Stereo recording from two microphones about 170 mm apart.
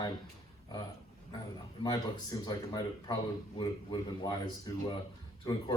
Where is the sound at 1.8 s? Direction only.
25° left (ahead or behind).